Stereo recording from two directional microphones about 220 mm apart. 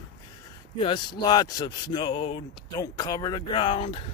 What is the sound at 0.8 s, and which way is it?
Speech, 20° left (ahead or behind).